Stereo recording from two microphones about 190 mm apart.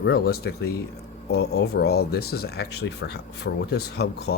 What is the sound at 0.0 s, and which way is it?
Speech, 55° left (ahead or behind).